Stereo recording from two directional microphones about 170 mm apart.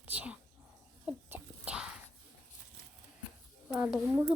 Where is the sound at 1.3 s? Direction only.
10° right (ahead or behind).